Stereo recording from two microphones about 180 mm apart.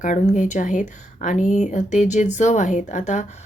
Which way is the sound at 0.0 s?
45° left (ahead or behind).